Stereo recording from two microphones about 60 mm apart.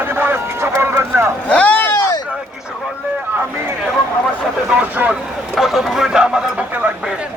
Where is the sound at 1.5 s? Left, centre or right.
Left.